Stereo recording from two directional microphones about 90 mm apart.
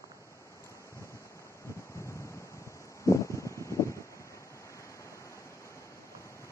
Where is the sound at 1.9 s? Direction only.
35° left (ahead or behind).